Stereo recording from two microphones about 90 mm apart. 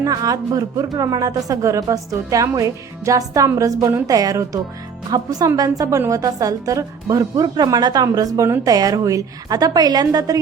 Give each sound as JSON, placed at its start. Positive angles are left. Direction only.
{"t": 0.0, "sound": "a woman's voice", "side_deg": -45}